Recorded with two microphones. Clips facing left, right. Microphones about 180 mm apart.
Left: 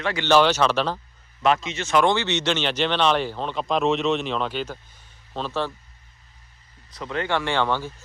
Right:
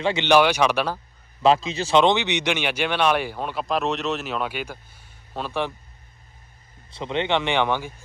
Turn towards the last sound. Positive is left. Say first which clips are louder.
# right 1 dB
turn(degrees=-15)  # may be behind; listen again after turning